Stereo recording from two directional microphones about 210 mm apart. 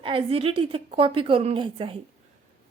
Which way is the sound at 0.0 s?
25° right (ahead or behind).